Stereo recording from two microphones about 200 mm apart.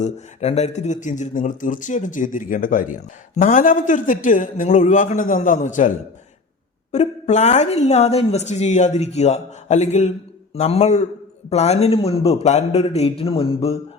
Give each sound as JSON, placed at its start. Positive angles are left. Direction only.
{"t": 0.0, "sound": "speech", "side_deg": 35}
{"t": 6.9, "sound": "speech", "side_deg": 35}